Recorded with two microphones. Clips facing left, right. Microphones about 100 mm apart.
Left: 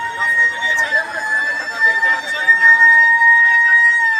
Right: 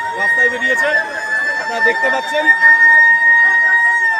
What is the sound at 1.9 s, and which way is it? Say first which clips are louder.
Speech: right 3 dB; 90° right.